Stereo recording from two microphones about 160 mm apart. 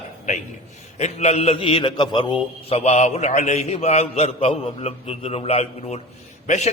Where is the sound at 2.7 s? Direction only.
45° left (ahead or behind).